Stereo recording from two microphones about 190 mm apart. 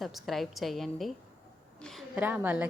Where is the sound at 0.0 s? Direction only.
Centre (ahead or behind).